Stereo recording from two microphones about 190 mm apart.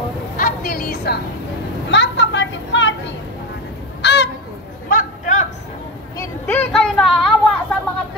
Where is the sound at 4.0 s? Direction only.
65° left (ahead or behind).